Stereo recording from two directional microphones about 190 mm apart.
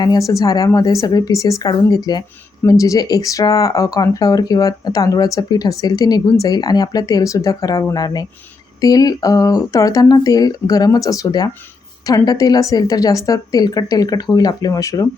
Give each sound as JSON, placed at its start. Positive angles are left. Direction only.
{"t": 0.0, "sound": "speech", "side_deg": 20}